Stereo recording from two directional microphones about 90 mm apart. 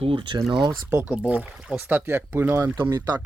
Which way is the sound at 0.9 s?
15° right (ahead or behind).